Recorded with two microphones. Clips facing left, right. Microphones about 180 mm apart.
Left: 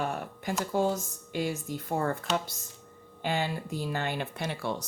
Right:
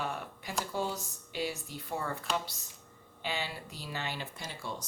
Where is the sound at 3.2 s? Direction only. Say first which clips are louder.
Left 7 dB; 50° left (ahead or behind); by 4.8 s 65° left (ahead or behind).